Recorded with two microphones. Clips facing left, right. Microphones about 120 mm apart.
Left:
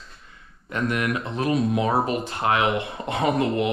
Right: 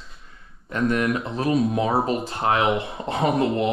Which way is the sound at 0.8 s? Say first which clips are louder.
Right 4 dB; 30° right (ahead or behind).